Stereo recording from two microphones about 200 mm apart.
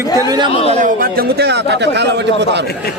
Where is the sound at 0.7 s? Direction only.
45° right (ahead or behind); by 2.6 s 60° right (ahead or behind).